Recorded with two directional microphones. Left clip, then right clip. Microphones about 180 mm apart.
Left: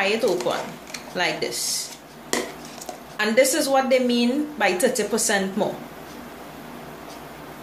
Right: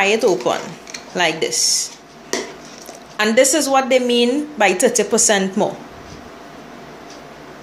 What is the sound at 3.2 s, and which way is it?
A woman's voice, 45° right (ahead or behind).